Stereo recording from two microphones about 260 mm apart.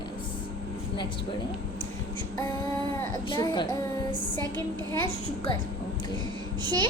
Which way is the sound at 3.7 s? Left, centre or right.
Centre.